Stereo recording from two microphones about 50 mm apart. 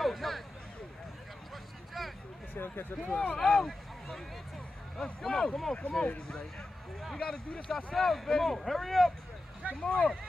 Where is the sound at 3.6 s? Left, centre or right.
Centre.